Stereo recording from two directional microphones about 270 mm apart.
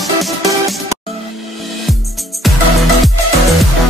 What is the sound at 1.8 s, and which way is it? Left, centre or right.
Music, centre.